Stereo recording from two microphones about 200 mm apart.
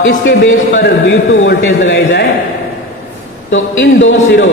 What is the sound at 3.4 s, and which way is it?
Speech, 70° left (ahead or behind).